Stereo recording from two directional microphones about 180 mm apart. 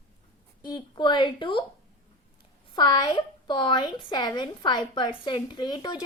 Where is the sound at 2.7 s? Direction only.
25° left (ahead or behind).